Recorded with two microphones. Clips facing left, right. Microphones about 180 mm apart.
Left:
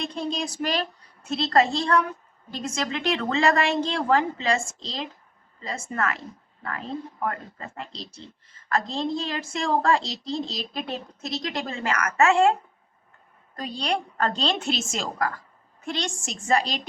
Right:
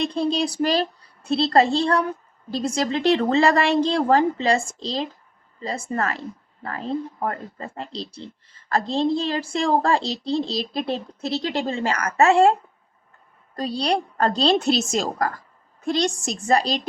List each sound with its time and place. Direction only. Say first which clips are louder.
0.0 s a woman's voice: right 7 dB; 35° right (ahead or behind)
13.6 s a woman's voice: right 5 dB; 35° right (ahead or behind)